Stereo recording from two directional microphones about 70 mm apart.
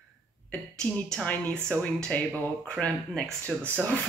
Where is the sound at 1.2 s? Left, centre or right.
Centre.